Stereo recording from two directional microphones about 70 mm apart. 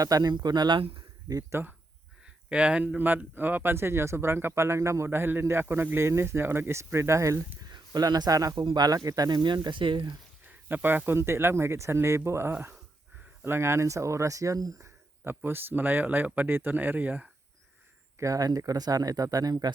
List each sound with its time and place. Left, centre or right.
0.0 s speech: right
1.5 s speech: right
2.2 s speech: centre; by 7.4 s right
7.6 s speech: right
10.7 s speech: right
15.4 s speech: right
18.2 s speech: right